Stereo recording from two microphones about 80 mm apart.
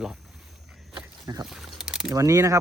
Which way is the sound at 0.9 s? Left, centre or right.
Right.